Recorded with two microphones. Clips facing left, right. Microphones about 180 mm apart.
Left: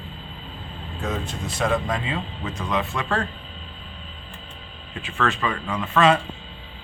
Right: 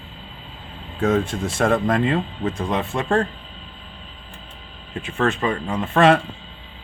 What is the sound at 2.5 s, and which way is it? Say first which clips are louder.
Speech: right 1 dB; 30° right (ahead or behind).